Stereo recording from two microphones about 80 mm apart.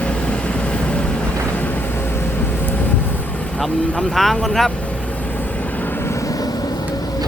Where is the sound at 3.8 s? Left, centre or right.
Centre.